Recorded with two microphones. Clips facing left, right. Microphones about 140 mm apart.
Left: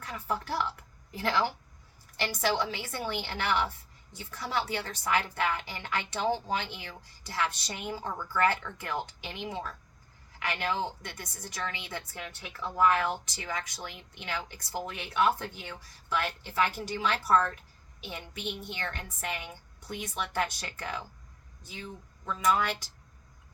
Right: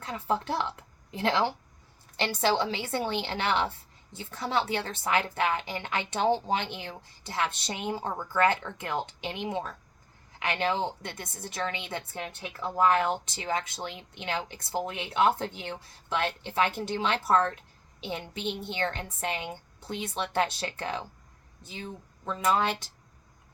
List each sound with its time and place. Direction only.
0.0 s a woman's voice: 25° right (ahead or behind)